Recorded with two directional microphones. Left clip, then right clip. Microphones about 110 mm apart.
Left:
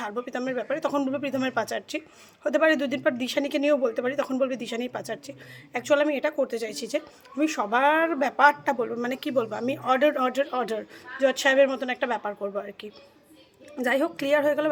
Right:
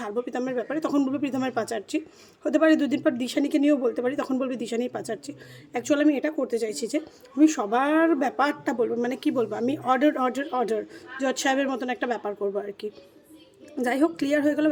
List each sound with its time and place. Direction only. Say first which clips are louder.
0.0 s speech: right 1 dB; 40° right (ahead or behind)
6.2 s speech: even; 40° right (ahead or behind)
11.2 s speech: left 5 dB; 50° right (ahead or behind)